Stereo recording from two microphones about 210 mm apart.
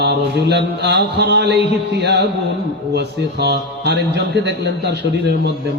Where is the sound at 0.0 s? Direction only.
55° right (ahead or behind).